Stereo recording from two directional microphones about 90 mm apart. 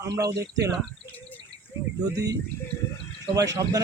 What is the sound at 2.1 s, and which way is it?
A man's voice, 40° right (ahead or behind).